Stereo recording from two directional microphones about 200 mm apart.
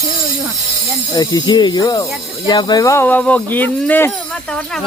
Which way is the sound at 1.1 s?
20° left (ahead or behind).